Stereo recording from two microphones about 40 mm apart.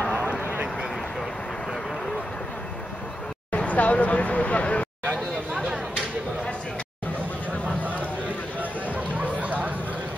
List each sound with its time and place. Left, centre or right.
0.0 s a sound: left
3.5 s speech: left
8.5 s chatter: right